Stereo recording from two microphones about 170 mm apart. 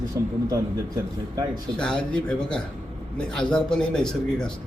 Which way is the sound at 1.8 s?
5° left (ahead or behind).